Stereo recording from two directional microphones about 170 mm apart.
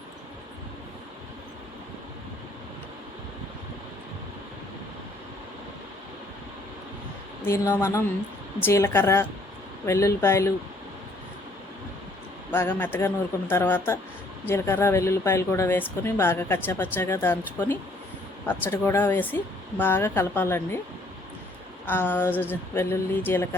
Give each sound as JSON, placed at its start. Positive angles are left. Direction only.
{"t": 7.4, "sound": "speech", "side_deg": 15}
{"t": 12.5, "sound": "speech", "side_deg": 10}
{"t": 21.8, "sound": "speech", "side_deg": 10}